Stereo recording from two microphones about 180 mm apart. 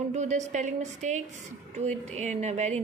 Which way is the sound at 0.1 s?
40° right (ahead or behind).